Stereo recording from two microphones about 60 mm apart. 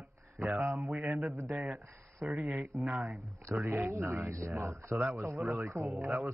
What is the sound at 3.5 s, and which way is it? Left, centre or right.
Speech, right.